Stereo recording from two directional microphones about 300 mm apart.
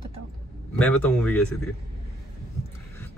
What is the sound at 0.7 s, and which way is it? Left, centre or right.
Speech, centre.